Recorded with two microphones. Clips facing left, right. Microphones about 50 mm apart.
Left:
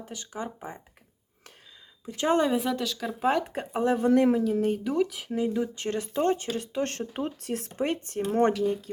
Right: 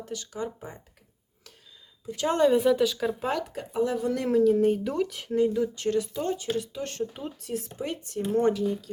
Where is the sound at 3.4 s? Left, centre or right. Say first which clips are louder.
Left 1 dB; left.